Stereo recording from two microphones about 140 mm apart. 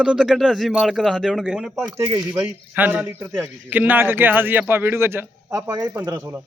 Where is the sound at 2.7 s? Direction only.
15° right (ahead or behind).